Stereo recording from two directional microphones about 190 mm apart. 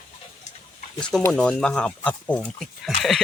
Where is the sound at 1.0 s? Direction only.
5° left (ahead or behind).